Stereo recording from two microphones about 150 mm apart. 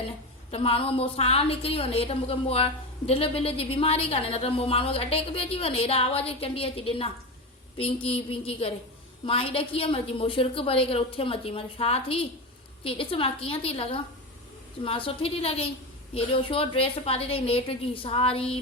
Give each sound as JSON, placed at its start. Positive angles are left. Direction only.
{"t": 0.5, "sound": "a woman's voice", "side_deg": 40}